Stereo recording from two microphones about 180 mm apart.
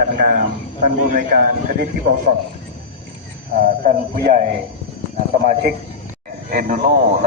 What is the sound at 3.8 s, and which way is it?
Speech, 55° right (ahead or behind).